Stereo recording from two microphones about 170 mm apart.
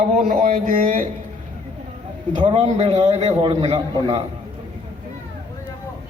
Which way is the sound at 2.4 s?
35° right (ahead or behind).